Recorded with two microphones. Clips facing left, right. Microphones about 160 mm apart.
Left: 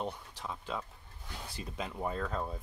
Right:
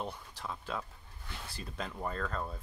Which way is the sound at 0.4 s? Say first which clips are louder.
Right 1 dB; 5° left (ahead or behind).